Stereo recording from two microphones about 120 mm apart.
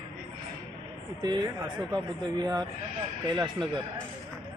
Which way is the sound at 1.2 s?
35° right (ahead or behind).